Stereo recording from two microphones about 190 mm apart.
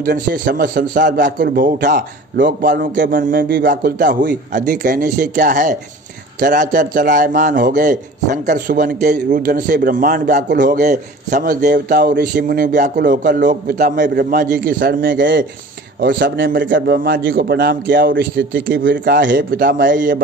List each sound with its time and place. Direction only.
0.0 s a man's voice: 45° right (ahead or behind)
3.7 s a man's voice: 45° right (ahead or behind)
15.0 s a man's voice: 70° right (ahead or behind); by 18.2 s 50° right (ahead or behind)
18.5 s speech: 75° right (ahead or behind)
19.3 s a man's voice: 50° right (ahead or behind)